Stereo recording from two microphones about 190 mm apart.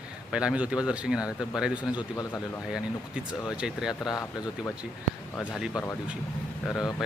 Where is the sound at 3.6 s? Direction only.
5° right (ahead or behind).